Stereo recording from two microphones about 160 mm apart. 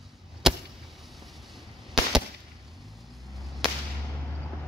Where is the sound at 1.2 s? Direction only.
Centre (ahead or behind).